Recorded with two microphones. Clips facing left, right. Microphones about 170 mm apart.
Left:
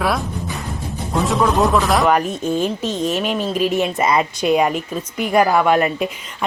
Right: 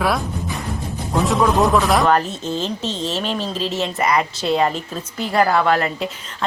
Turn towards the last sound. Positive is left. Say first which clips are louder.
# left 2 dB
turn(degrees=15)  # may be behind; listen again after turning